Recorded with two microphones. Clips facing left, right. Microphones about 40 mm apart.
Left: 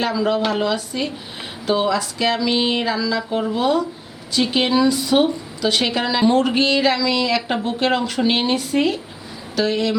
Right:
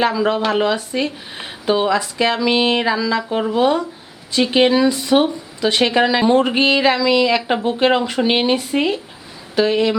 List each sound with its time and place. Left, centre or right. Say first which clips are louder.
0.0 s speech: right 2 dB; right